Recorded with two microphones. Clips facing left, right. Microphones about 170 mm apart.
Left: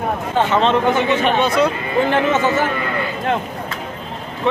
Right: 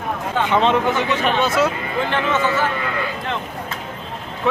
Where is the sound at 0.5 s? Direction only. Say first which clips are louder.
Even; 15° right (ahead or behind).